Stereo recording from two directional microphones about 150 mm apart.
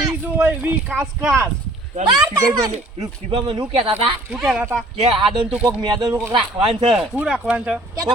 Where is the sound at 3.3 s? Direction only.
35° right (ahead or behind).